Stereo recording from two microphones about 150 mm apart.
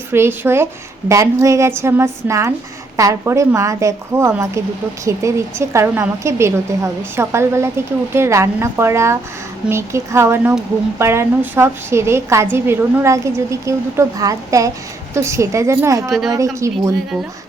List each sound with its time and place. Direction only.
0.1 s a woman's voice: 15° right (ahead or behind)